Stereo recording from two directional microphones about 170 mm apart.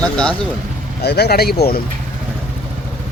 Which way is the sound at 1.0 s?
70° left (ahead or behind).